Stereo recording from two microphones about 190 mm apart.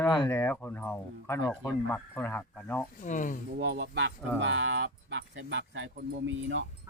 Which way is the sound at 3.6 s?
65° right (ahead or behind).